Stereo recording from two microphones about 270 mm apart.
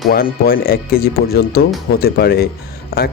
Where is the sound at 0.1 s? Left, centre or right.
Left.